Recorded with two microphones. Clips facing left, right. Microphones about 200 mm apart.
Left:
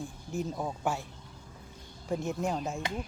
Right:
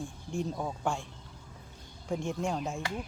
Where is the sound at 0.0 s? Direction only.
5° left (ahead or behind).